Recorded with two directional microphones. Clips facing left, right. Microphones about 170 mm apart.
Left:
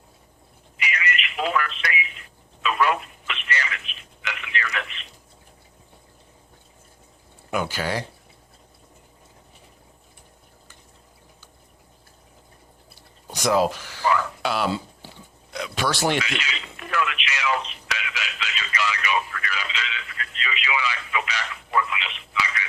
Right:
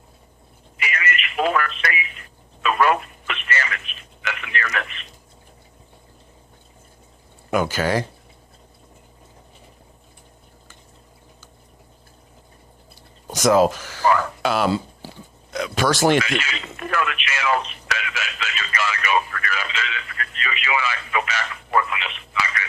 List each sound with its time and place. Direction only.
0.8 s telephone: 50° right (ahead or behind)
7.5 s speech: 45° right (ahead or behind)
13.3 s speech: 45° right (ahead or behind)
15.5 s radio: 45° right (ahead or behind)